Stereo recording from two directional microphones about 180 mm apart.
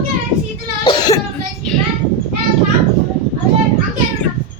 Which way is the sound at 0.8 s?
25° left (ahead or behind).